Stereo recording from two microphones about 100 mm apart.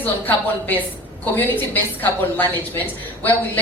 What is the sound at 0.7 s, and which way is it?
A woman's voice, 20° left (ahead or behind).